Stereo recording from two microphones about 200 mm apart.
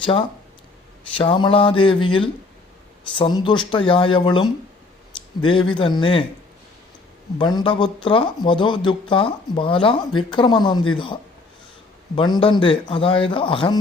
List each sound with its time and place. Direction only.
0.0 s speech: 25° left (ahead or behind)
7.3 s speech: 25° left (ahead or behind)